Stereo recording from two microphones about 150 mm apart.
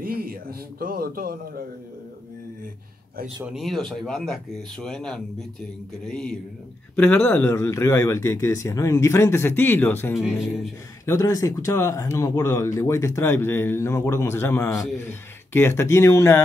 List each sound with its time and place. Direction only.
0.0 s a man's voice: 80° right
3.4 s speech: centre (ahead or behind); by 16.4 s 15° left (ahead or behind)